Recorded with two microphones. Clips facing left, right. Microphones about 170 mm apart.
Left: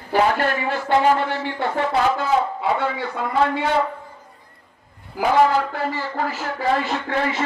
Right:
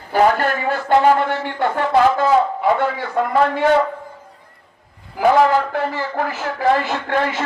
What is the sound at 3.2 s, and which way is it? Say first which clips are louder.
Music: right 11 dB; 60° right (ahead or behind).